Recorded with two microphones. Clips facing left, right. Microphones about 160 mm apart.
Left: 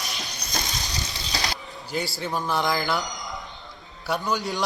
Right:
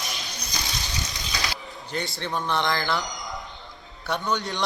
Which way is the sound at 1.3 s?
35° left (ahead or behind).